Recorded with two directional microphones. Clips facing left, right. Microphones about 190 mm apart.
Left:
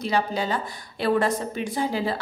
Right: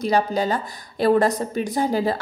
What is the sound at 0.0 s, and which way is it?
A woman's voice, 40° right (ahead or behind).